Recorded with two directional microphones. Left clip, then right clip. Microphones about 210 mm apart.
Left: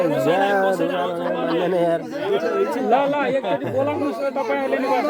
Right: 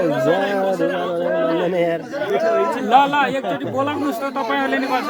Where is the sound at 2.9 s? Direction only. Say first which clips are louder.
Right 5 dB; 40° right (ahead or behind).